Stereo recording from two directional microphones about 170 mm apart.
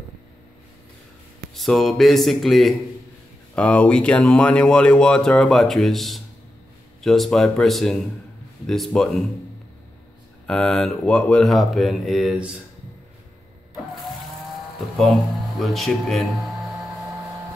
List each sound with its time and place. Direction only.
1.5 s speech: centre (ahead or behind)
10.4 s speech: 5° left (ahead or behind)
15.0 s speech: centre (ahead or behind)